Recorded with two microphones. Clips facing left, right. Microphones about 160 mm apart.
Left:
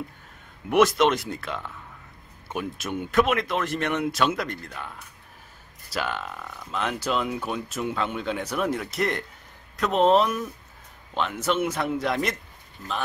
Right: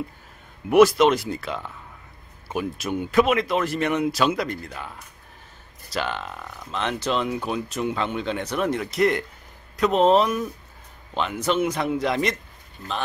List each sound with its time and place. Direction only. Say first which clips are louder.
0.7 s speech: right 4 dB; centre (ahead or behind)